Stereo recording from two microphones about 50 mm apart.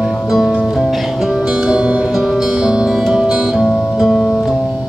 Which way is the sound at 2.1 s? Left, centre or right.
Centre.